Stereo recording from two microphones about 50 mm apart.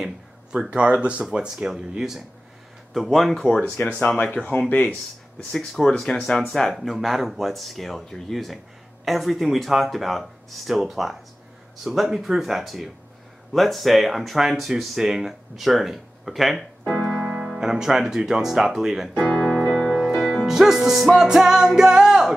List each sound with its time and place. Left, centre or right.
0.0 s a sound: centre
0.7 s speech: right
1.3 s music: centre
2.9 s speech: centre
3.8 s speech: left
4.6 s speech: left
5.7 s speech: centre
6.7 s speech: centre
17.2 s speech: centre
19.3 s keyboard: centre
20.0 s music: centre